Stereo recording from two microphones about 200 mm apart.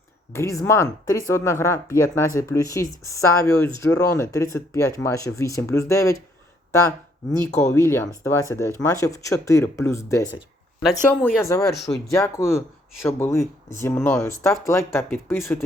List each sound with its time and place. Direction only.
0.3 s speech: 15° left (ahead or behind)
7.6 s speech: 15° left (ahead or behind)